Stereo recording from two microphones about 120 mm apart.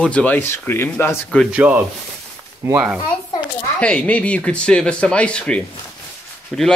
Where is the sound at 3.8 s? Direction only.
10° left (ahead or behind).